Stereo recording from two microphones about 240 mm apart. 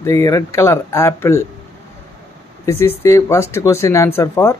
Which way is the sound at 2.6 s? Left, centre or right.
Centre.